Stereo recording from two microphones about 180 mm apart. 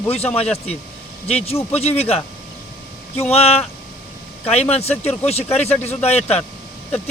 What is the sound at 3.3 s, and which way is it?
A man's voice, 35° left (ahead or behind).